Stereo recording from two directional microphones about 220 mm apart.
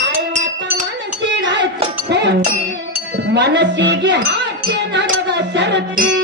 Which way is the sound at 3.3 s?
50° right (ahead or behind).